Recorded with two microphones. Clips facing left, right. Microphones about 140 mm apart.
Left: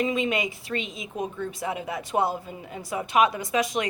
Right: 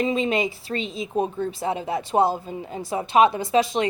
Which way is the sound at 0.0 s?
30° right (ahead or behind).